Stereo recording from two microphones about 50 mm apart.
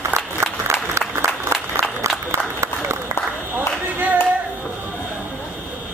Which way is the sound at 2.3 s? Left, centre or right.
Right.